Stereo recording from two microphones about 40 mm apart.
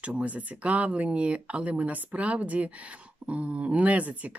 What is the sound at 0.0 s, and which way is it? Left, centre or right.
Speech, right.